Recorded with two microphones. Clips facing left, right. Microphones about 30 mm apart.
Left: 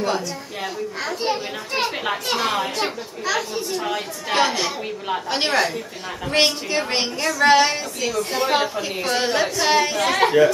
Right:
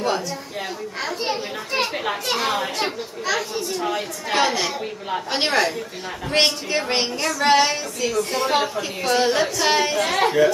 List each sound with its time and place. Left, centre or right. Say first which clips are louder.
0.0 s a child's voice: even; centre
9.1 s a child's voice: right 2 dB; centre
9.9 s speech: left 2 dB; centre